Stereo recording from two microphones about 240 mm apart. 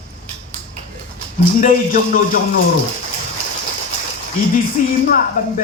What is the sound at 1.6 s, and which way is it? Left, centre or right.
Speech, left.